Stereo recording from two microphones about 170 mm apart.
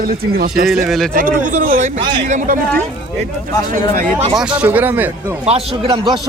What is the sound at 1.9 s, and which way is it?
Speech, 25° right (ahead or behind).